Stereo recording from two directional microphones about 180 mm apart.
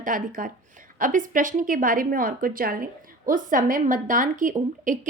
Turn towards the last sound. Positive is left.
turn(degrees=-45)  # may be behind; listen again after turning